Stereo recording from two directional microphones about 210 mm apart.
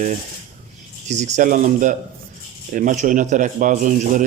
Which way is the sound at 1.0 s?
35° right (ahead or behind).